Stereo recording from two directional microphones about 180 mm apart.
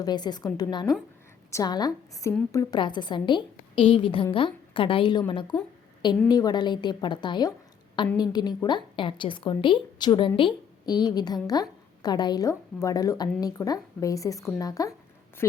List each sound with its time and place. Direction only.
0.0 s a woman's voice: 25° left (ahead or behind)